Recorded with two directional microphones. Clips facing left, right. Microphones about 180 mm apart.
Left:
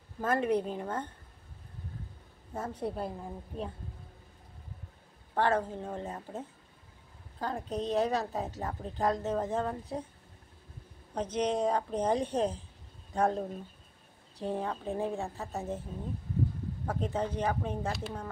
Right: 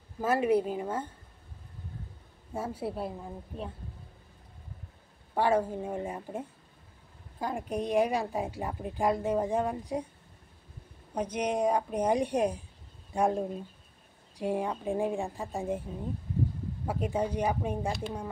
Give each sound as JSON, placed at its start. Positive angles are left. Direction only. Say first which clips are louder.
{"t": 0.2, "sound": "a woman's voice", "louder": "right 3 dB", "side_deg": -10}
{"t": 2.5, "sound": "a woman's voice", "louder": "right 1 dB", "side_deg": -10}
{"t": 5.3, "sound": "a woman's voice", "louder": "right 2 dB", "side_deg": -10}
{"t": 11.1, "sound": "a woman's voice", "louder": "even", "side_deg": -10}
{"t": 14.4, "sound": "a woman's voice", "louder": "right 3 dB", "side_deg": -15}
{"t": 16.8, "sound": "a woman's voice", "louder": "right 2 dB", "side_deg": -10}